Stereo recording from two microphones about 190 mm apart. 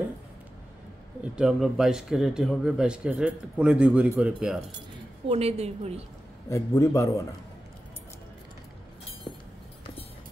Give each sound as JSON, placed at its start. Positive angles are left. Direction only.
{"t": 1.3, "sound": "speech", "side_deg": -5}
{"t": 5.3, "sound": "a woman's voice", "side_deg": -35}
{"t": 6.5, "sound": "a man's voice", "side_deg": 15}